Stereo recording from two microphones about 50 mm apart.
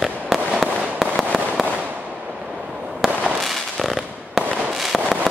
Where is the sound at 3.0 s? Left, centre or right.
Centre.